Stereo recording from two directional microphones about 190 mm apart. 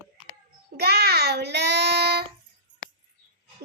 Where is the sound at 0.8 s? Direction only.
55° right (ahead or behind).